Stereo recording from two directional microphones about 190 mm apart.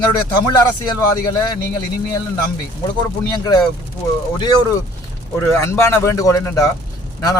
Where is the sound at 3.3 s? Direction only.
20° left (ahead or behind).